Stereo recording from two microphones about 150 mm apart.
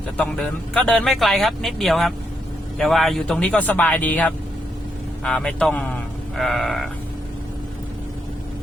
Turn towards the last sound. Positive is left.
turn(degrees=0)  # may be behind; listen again after turning